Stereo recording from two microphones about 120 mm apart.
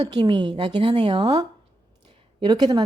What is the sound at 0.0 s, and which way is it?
Speech, 35° right (ahead or behind).